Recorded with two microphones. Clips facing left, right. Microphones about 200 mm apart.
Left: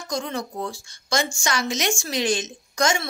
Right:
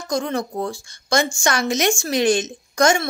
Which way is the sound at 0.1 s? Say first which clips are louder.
Right 5 dB; 55° right (ahead or behind).